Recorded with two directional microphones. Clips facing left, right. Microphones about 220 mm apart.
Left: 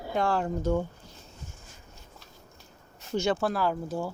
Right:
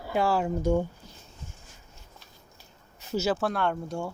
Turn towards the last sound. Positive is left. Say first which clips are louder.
# even
turn(degrees=0)  # may be behind; listen again after turning